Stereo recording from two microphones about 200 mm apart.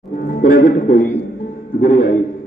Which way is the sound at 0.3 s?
45° left (ahead or behind).